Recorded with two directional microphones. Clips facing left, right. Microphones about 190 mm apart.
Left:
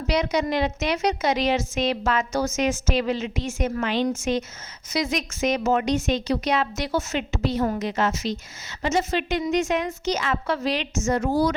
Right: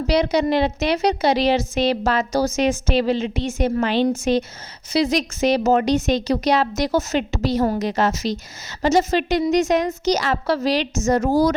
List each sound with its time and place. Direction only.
0.1 s a woman's voice: 35° right (ahead or behind)